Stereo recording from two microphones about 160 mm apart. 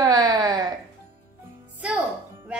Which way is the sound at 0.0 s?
25° right (ahead or behind).